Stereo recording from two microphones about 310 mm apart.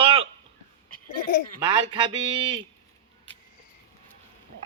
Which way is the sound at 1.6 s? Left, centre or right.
Centre.